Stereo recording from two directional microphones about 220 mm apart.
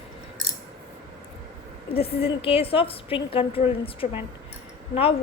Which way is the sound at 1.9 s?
25° left (ahead or behind).